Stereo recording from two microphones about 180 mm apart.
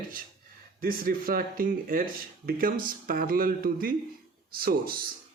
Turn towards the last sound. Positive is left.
turn(degrees=-55)  # may be behind; listen again after turning